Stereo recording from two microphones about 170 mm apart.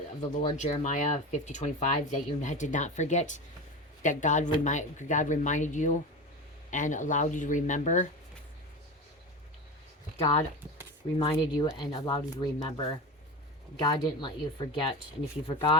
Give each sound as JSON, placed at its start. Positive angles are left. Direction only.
{"t": 0.2, "sound": "speech", "side_deg": 45}
{"t": 10.2, "sound": "speech", "side_deg": 35}